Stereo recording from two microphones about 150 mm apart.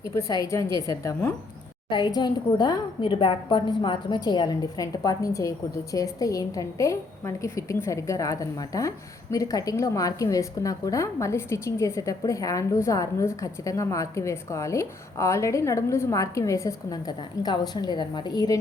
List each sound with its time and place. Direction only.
0.1 s a woman's voice: 25° left (ahead or behind)